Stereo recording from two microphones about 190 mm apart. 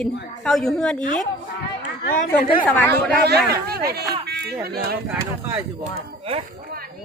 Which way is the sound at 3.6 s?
55° right (ahead or behind).